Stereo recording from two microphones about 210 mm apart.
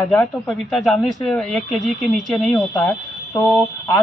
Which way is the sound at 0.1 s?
10° left (ahead or behind).